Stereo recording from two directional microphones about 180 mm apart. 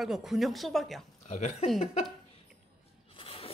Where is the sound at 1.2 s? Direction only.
35° left (ahead or behind).